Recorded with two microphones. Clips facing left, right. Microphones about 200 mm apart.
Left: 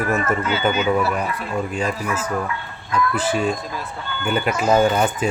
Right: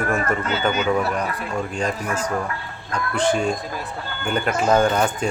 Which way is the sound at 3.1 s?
5° left (ahead or behind).